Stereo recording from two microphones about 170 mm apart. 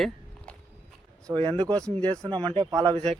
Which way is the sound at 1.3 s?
30° right (ahead or behind).